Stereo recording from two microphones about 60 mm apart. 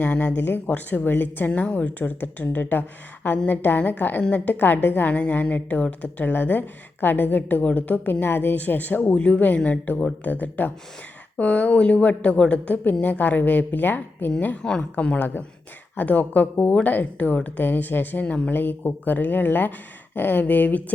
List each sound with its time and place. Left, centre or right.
0.0 s a woman's voice: left
0.3 s a woman's voice: left
4.2 s a woman's voice: left
4.5 s a woman's voice: left
14.6 s a woman's voice: centre; by 20.8 s left